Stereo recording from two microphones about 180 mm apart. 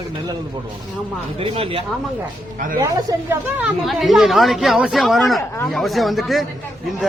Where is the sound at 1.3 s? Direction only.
30° right (ahead or behind).